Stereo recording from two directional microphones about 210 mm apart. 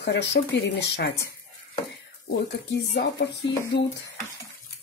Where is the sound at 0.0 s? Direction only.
55° left (ahead or behind).